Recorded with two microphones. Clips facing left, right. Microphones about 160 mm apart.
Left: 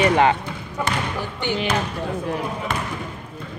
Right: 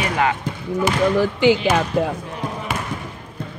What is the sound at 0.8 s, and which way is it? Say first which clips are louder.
Speech: right 9 dB; 90° right.